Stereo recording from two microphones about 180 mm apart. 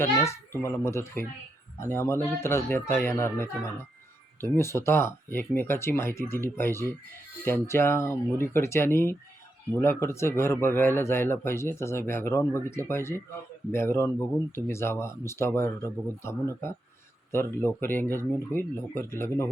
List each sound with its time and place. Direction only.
0.0 s speech: 15° left (ahead or behind)